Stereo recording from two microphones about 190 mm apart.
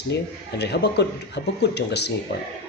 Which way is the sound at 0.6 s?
60° left (ahead or behind).